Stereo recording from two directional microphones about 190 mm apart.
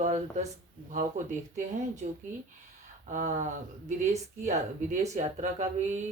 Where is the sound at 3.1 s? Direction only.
40° right (ahead or behind).